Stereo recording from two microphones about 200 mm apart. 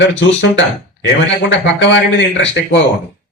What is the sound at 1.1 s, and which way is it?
Speech, 60° left (ahead or behind).